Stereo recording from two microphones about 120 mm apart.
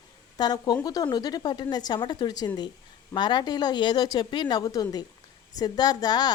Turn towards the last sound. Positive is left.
turn(degrees=35)  # may be behind; listen again after turning